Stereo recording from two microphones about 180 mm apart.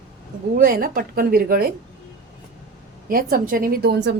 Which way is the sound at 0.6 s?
55° right (ahead or behind).